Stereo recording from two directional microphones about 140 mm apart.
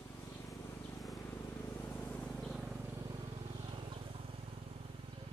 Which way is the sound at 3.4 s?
40° right (ahead or behind).